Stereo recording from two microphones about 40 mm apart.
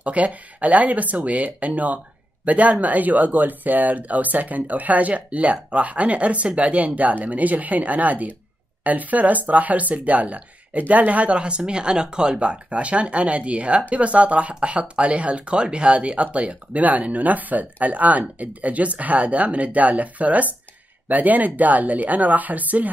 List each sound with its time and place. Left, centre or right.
0.0 s speech: right